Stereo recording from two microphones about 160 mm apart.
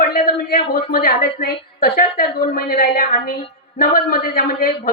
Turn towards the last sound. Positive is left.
turn(degrees=70)  # may be behind; listen again after turning